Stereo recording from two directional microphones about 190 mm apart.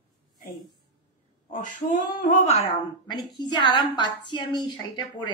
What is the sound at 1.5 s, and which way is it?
Speech, 45° left (ahead or behind).